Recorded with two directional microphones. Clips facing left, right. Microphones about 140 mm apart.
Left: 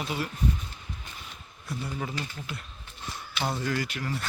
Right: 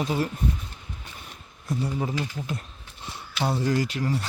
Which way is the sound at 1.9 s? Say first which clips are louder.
Right 6 dB; 25° right (ahead or behind).